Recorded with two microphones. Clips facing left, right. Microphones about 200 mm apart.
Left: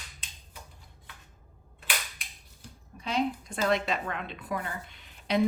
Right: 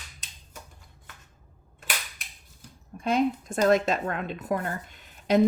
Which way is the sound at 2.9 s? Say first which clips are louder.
Right 7 dB; 50° right (ahead or behind).